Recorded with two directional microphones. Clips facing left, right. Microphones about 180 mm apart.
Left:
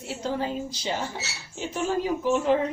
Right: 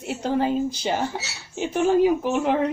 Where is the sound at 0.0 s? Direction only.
60° right (ahead or behind).